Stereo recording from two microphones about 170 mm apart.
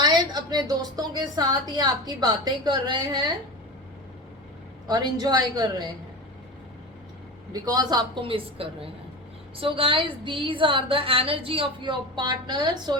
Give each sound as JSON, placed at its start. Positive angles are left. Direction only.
{"t": 0.0, "sound": "a woman's voice", "side_deg": -25}
{"t": 4.9, "sound": "a woman's voice", "side_deg": -25}
{"t": 7.5, "sound": "a woman's voice", "side_deg": -20}